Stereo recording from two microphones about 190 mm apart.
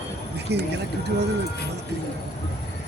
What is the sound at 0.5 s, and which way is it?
Speech, 60° right (ahead or behind).